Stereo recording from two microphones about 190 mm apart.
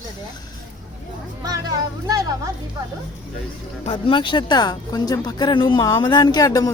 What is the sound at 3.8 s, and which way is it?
Speech, 30° left (ahead or behind).